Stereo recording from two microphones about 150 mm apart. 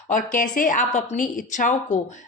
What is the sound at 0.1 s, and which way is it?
A woman's voice, 60° left (ahead or behind).